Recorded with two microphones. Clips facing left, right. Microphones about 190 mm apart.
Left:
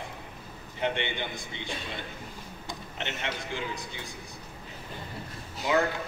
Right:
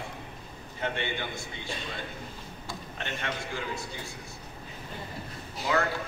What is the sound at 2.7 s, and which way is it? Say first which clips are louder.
A man's voice: even; 20° left (ahead or behind).